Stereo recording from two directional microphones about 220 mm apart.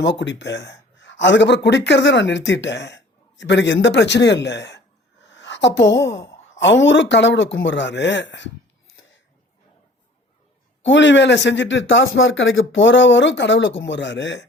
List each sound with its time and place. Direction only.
0.0 s a woman's voice: 55° left (ahead or behind)
9.0 s a sound: 60° left (ahead or behind)
10.8 s speech: 55° left (ahead or behind)